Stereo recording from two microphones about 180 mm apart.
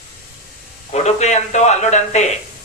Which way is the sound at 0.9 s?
40° left (ahead or behind).